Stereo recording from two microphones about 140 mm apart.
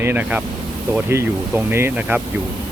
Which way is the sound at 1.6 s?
15° right (ahead or behind).